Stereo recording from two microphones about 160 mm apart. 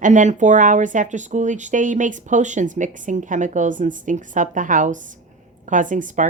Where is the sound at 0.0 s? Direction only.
50° right (ahead or behind).